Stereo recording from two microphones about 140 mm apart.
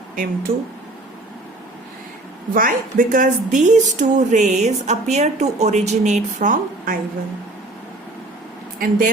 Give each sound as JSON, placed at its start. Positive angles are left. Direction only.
{"t": 0.5, "sound": "speech", "side_deg": -85}
{"t": 2.5, "sound": "speech", "side_deg": -80}
{"t": 8.8, "sound": "speech", "side_deg": -75}